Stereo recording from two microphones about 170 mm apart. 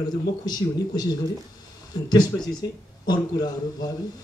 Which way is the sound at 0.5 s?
25° left (ahead or behind).